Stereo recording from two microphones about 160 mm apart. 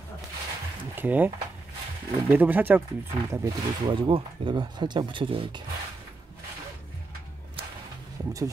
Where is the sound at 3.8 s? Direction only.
30° right (ahead or behind).